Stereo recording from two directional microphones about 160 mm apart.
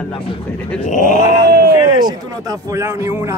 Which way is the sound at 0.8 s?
50° left (ahead or behind).